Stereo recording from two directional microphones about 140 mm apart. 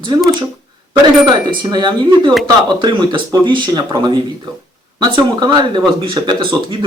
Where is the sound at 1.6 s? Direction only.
30° right (ahead or behind).